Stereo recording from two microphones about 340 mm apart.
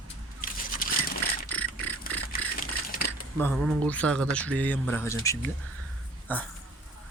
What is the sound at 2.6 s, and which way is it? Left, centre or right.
Crushing, left.